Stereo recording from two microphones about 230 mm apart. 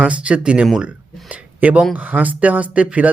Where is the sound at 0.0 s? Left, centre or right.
Centre.